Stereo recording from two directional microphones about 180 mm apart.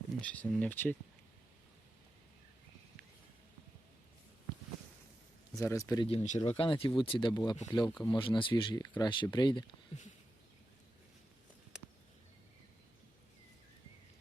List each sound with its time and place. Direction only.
0.2 s speech: 5° left (ahead or behind)
5.5 s speech: 15° left (ahead or behind)
6.1 s speech: 40° left (ahead or behind)